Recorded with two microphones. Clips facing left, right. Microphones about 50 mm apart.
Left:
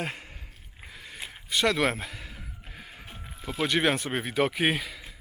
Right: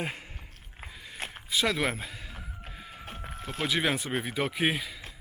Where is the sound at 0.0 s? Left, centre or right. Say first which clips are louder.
Left 1 dB; centre.